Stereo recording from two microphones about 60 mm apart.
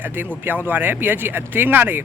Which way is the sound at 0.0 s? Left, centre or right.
Right.